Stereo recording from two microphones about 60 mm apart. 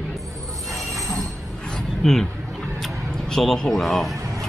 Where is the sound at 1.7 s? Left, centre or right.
Centre.